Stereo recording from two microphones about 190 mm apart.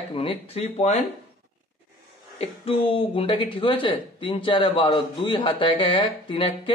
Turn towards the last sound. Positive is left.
turn(degrees=25)  # may be behind; listen again after turning